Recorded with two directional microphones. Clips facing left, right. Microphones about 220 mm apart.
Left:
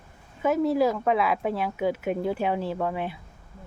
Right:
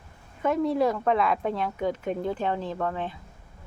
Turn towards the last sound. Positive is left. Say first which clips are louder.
# left 2 dB
turn(degrees=10)  # may be behind; listen again after turning